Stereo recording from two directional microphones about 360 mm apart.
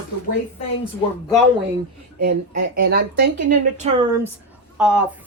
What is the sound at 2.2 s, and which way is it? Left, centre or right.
Speech, right.